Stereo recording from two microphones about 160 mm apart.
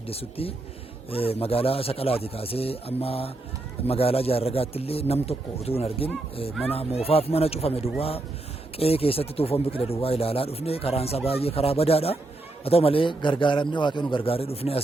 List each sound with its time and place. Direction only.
0.1 s speech: 35° left (ahead or behind)